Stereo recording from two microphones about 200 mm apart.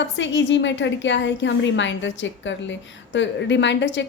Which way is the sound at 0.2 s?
65° left (ahead or behind).